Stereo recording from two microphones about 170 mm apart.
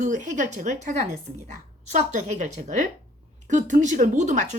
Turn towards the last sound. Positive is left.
turn(degrees=-45)  # may be behind; listen again after turning